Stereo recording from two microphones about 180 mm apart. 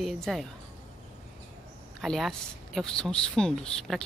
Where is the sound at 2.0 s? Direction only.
Centre (ahead or behind).